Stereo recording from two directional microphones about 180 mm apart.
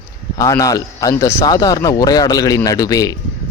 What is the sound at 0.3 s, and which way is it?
Speech, 20° left (ahead or behind).